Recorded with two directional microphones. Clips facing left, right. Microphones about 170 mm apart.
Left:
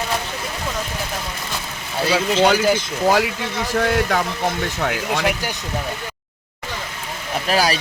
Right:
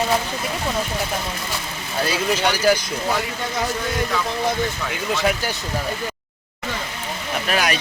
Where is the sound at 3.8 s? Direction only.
75° left (ahead or behind).